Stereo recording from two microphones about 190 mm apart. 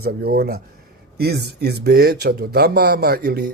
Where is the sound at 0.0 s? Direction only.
55° right (ahead or behind).